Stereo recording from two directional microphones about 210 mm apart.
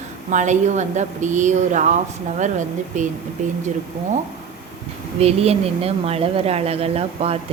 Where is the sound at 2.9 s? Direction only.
35° right (ahead or behind).